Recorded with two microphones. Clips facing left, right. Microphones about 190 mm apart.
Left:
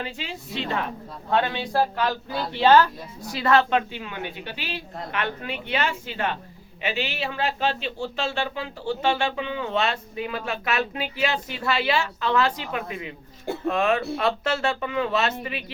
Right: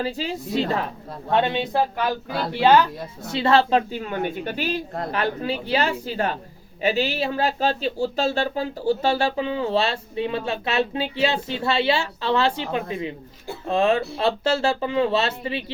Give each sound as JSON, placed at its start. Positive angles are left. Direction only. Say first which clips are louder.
{"t": 0.0, "sound": "speech", "louder": "right 7 dB", "side_deg": -35}
{"t": 1.3, "sound": "speech", "louder": "right 3 dB", "side_deg": -25}